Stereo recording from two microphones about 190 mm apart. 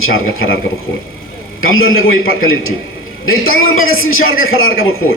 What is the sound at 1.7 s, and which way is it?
A man's voice, 90° left.